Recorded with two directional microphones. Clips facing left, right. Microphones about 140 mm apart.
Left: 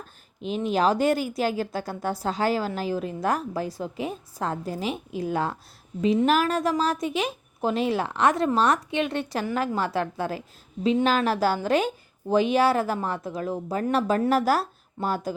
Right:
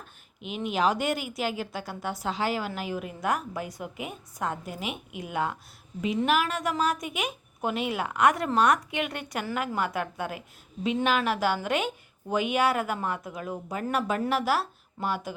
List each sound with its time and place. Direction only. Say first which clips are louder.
0.4 s a woman's voice: left 4 dB; 35° left (ahead or behind)